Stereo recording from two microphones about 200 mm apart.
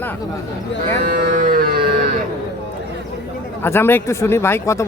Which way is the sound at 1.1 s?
40° right (ahead or behind).